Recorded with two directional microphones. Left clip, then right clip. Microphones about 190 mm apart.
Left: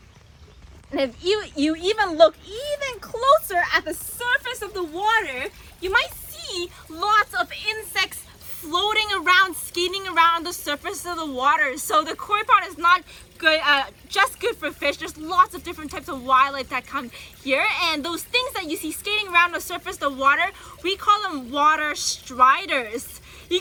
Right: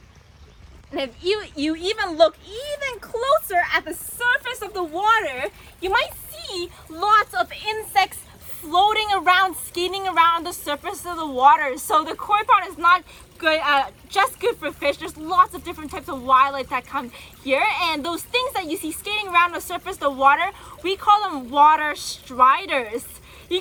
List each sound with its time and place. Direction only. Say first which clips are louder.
0.9 s speech: left 1 dB; 35° left (ahead or behind)
3.6 s a woman's voice: even; 5° left (ahead or behind)
4.2 s a sound: right 2 dB; 15° right (ahead or behind)
4.7 s speech: right 2 dB; 30° right (ahead or behind)
5.8 s a woman's voice: even; 45° right (ahead or behind)